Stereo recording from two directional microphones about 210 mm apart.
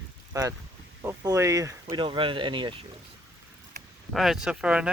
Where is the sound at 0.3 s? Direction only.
15° right (ahead or behind).